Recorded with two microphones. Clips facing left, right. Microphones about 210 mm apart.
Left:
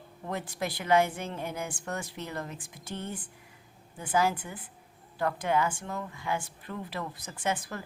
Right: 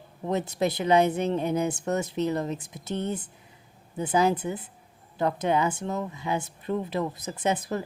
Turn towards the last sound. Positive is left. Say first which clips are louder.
# right 6 dB
turn(degrees=-20)  # may be behind; listen again after turning